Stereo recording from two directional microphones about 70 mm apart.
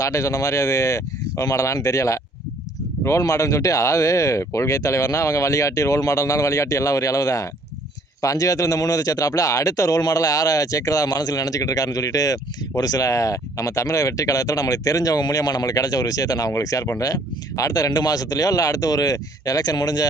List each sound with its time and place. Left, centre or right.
0.0 s speech: left